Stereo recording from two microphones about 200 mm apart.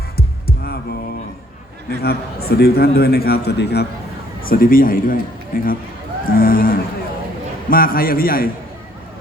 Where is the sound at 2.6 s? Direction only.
50° left (ahead or behind).